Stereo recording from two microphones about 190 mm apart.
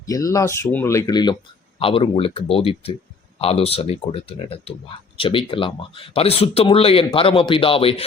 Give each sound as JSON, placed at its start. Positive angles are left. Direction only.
{"t": 0.0, "sound": "speech", "side_deg": 15}